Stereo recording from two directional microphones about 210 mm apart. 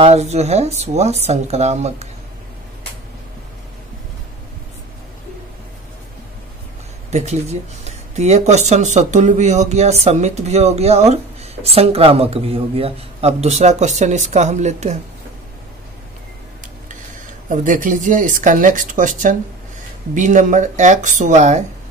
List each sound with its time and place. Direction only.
0.0 s speech: 30° right (ahead or behind)
7.1 s speech: 30° right (ahead or behind)
17.5 s speech: 40° right (ahead or behind)